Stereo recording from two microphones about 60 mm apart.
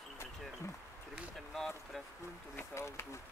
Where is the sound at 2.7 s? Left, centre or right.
Left.